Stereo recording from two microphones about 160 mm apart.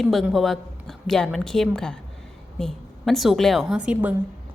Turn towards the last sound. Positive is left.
turn(degrees=-5)  # may be behind; listen again after turning